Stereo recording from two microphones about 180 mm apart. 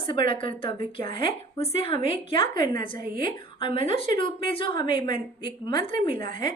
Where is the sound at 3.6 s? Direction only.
30° left (ahead or behind).